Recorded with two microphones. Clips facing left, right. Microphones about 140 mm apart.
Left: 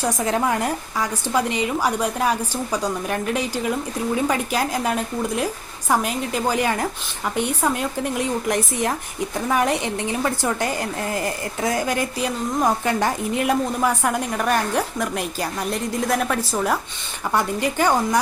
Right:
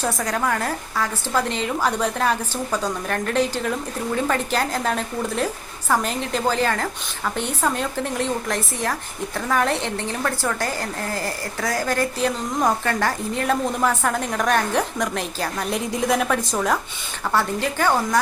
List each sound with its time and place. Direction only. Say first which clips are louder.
0.2 s a woman's voice: left 2 dB; 20° left (ahead or behind)